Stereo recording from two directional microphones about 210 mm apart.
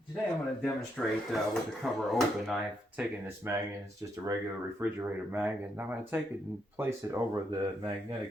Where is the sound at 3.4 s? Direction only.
15° right (ahead or behind).